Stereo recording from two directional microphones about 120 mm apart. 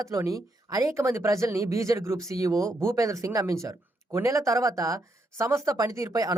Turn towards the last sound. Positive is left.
turn(degrees=-30)  # may be behind; listen again after turning